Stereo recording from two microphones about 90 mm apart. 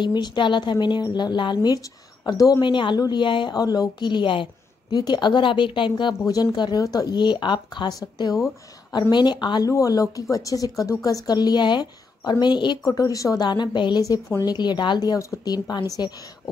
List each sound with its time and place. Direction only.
0.0 s a woman's voice: 55° left (ahead or behind); by 2.6 s 40° left (ahead or behind)
2.6 s a woman's voice: 60° left (ahead or behind)
4.9 s a woman's voice: 50° left (ahead or behind)
6.8 s a woman's voice: 40° left (ahead or behind)
9.7 s a woman's voice: 40° left (ahead or behind); by 12.7 s 55° left (ahead or behind)
12.8 s speech: 40° left (ahead or behind)
13.5 s a woman's voice: 55° left (ahead or behind)